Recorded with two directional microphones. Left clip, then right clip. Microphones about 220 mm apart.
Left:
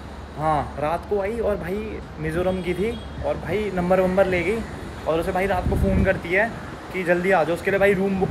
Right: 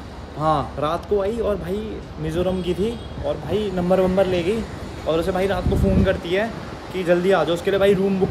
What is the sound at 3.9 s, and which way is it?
Speech, 15° right (ahead or behind).